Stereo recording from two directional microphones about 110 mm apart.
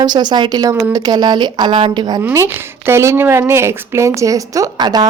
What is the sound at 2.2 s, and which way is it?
A woman's voice, 25° right (ahead or behind).